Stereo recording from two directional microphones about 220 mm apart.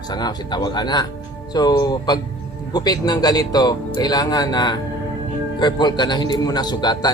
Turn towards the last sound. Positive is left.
turn(degrees=20)  # may be behind; listen again after turning